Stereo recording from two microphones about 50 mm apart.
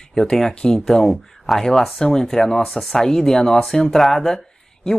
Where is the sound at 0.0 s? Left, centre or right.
Centre.